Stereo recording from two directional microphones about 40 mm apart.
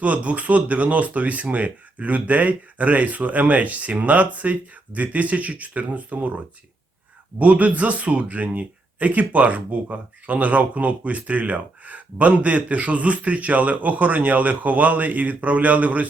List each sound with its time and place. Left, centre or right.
0.0 s speech: right